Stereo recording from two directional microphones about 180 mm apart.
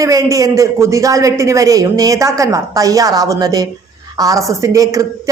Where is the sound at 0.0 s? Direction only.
20° right (ahead or behind).